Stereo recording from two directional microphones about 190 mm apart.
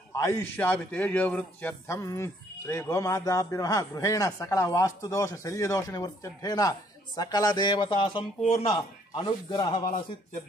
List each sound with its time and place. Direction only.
0.2 s a man's voice: 10° left (ahead or behind)
9.9 s speech: 40° left (ahead or behind)